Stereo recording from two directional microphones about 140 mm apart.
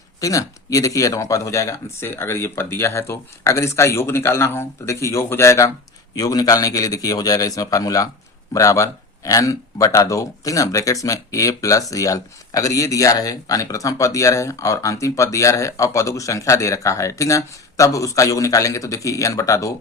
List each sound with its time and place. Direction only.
0.2 s speech: 25° left (ahead or behind)